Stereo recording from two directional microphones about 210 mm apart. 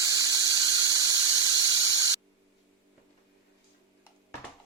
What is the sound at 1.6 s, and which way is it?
Squeal, 15° right (ahead or behind).